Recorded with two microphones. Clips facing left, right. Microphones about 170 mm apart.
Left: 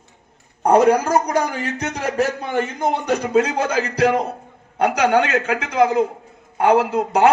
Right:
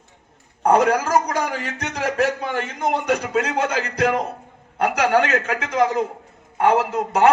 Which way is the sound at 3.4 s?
35° left (ahead or behind).